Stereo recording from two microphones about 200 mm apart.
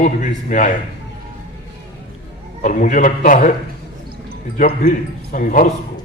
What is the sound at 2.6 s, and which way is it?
Speech, 40° left (ahead or behind).